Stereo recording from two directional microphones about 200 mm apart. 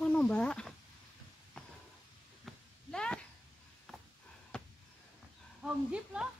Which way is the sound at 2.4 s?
5° left (ahead or behind).